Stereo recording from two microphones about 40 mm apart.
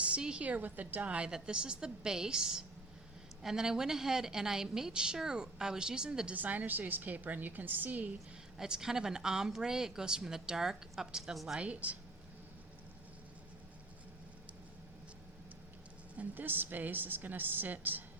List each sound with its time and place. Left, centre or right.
0.2 s a woman's voice: right
0.4 s a woman's voice: right
1.0 s a woman's voice: right
6.3 s a woman's voice: right
8.5 s a woman's voice: centre
11.6 s speech: right
16.3 s a woman's voice: right